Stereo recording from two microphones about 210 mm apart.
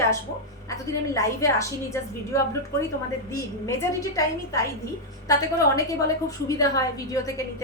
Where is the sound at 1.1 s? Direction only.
15° left (ahead or behind).